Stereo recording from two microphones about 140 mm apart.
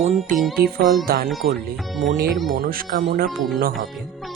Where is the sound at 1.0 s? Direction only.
90° right.